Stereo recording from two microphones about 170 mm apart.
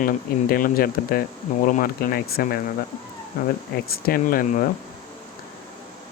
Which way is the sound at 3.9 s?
60° left (ahead or behind).